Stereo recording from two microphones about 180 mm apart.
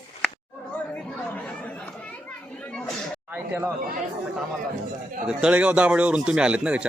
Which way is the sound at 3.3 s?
10° right (ahead or behind).